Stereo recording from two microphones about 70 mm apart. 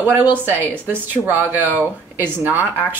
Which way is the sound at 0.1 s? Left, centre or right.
Right.